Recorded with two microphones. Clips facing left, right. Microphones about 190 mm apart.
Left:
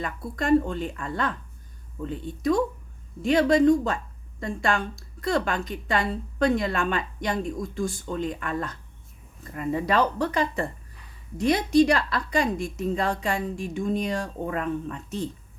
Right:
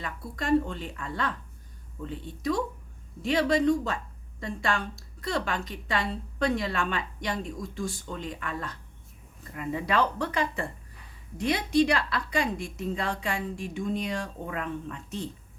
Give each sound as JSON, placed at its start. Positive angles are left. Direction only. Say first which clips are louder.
{"t": 0.0, "sound": "a woman's voice", "louder": "left 5 dB", "side_deg": 50}